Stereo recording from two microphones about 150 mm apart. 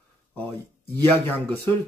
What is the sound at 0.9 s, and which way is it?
Speech, 10° left (ahead or behind).